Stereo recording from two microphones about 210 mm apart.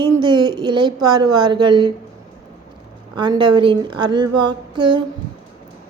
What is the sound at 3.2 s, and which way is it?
A woman's voice, 20° right (ahead or behind).